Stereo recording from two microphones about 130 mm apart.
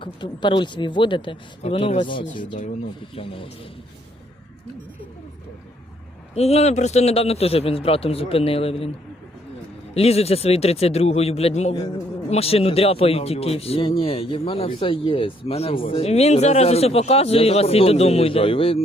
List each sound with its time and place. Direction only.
0.0 s speech: 40° left (ahead or behind)
6.3 s speech: 55° left (ahead or behind)
9.9 s speech: 50° left (ahead or behind)